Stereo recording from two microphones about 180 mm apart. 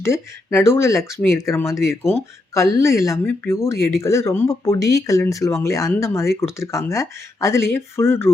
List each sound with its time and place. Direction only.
0.0 s speech: 15° left (ahead or behind)